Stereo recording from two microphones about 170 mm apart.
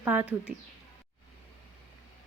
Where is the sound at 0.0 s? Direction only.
10° right (ahead or behind).